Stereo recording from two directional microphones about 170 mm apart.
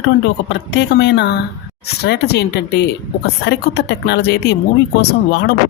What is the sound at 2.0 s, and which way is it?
Speech, 75° left (ahead or behind).